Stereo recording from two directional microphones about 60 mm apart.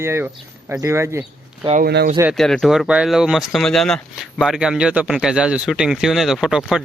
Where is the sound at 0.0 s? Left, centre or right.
Right.